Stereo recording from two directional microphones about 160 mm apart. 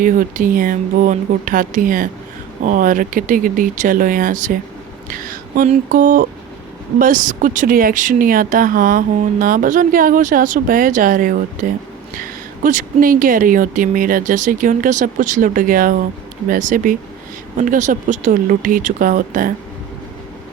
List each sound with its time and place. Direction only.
0.0 s speech: 60° right (ahead or behind)